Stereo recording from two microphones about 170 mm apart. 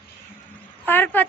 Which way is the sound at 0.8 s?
10° left (ahead or behind).